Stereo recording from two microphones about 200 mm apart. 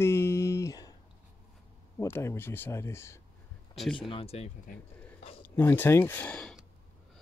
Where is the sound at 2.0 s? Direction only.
15° left (ahead or behind).